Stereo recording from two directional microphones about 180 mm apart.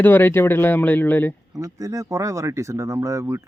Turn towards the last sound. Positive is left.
turn(degrees=-15)  # may be behind; listen again after turning